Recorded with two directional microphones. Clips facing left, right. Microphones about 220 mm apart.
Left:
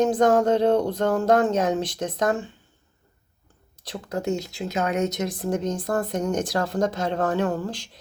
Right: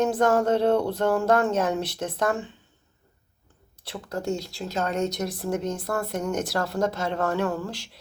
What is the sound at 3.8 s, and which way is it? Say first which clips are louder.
Speech: left 2 dB; 20° left (ahead or behind).